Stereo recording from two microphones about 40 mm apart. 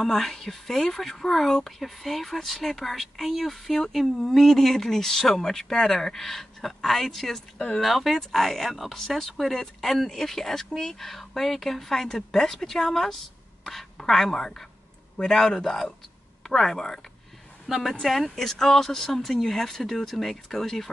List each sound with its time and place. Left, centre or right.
0.0 s speech: centre
7.5 s speech: left
7.8 s speech: centre
17.6 s speech: centre